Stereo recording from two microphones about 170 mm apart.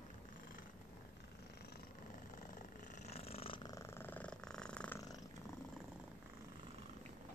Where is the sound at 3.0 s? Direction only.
35° left (ahead or behind); by 4.9 s 5° left (ahead or behind).